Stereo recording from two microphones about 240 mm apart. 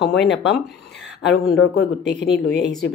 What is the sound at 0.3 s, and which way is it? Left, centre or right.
A woman's voice, left.